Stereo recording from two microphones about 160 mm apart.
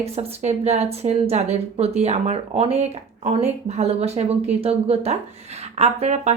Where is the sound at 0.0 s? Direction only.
40° right (ahead or behind).